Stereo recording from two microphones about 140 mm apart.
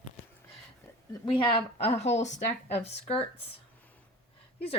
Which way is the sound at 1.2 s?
35° left (ahead or behind).